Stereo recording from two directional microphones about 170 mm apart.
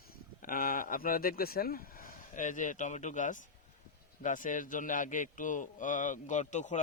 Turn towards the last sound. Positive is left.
turn(degrees=45)  # may be behind; listen again after turning